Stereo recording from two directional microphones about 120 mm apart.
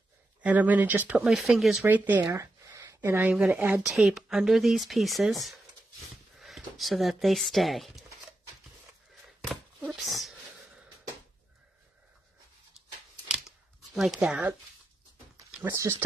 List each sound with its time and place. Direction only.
0.4 s speech: 15° right (ahead or behind)
2.3 s a sound: 25° right (ahead or behind)
3.1 s speech: 15° right (ahead or behind)
3.8 s speech: 5° right (ahead or behind)
6.3 s speech: centre (ahead or behind)
9.9 s speech: centre (ahead or behind)
13.9 s speech: centre (ahead or behind)
15.6 s speech: 20° right (ahead or behind)